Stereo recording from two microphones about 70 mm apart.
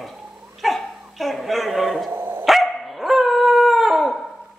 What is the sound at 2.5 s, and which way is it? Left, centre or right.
Dog, centre.